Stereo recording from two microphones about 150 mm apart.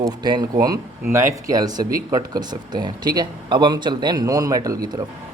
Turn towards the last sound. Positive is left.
turn(degrees=-25)  # may be behind; listen again after turning